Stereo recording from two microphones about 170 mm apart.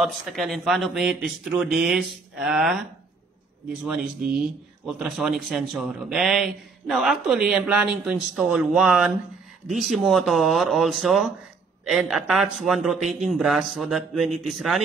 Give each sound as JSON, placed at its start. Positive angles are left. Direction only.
{"t": 0.0, "sound": "a man's voice", "side_deg": 0}
{"t": 4.2, "sound": "speech", "side_deg": -55}
{"t": 4.8, "sound": "a man's voice", "side_deg": -5}